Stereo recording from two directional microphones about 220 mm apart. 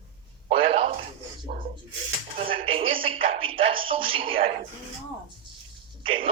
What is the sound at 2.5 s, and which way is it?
Speech, 25° right (ahead or behind).